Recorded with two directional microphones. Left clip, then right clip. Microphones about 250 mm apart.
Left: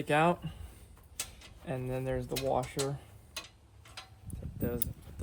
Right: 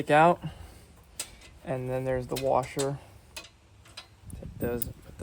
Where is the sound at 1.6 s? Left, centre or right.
Right.